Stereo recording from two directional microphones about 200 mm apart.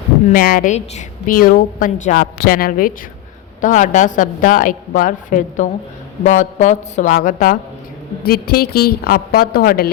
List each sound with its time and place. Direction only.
0.3 s a woman's voice: 45° left (ahead or behind)